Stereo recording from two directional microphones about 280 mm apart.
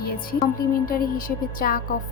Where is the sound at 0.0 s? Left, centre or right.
Left.